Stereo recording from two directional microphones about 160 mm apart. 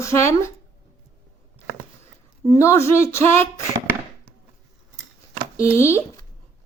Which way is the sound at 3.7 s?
15° right (ahead or behind).